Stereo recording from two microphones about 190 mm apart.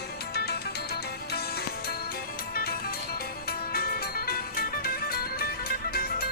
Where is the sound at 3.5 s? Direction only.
50° left (ahead or behind).